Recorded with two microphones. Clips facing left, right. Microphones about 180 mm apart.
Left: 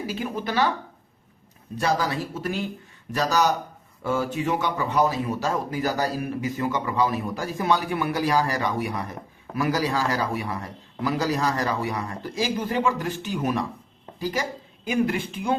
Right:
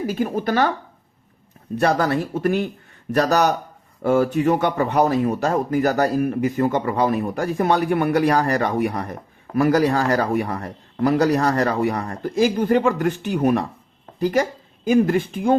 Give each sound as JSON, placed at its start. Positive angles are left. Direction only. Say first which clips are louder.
{"t": 0.1, "sound": "speech", "louder": "right 7 dB", "side_deg": -50}
{"t": 1.7, "sound": "a man's voice", "louder": "right 6 dB", "side_deg": -60}
{"t": 14.8, "sound": "speech", "louder": "right 7 dB", "side_deg": -45}